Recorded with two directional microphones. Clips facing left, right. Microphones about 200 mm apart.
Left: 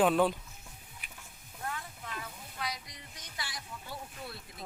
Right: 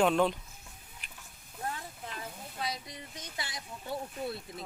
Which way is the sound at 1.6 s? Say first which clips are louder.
Right 1 dB; 30° right (ahead or behind).